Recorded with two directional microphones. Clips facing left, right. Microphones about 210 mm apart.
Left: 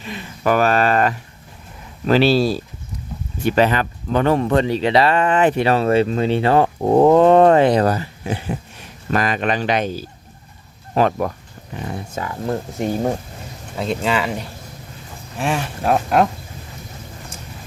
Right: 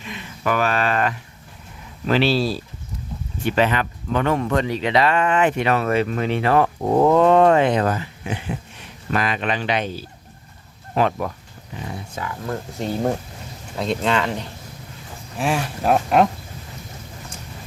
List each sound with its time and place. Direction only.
0.0 s speech: 35° left (ahead or behind)
11.7 s speech: 55° left (ahead or behind)
12.5 s speech: 15° left (ahead or behind)
13.7 s speech: 5° left (ahead or behind)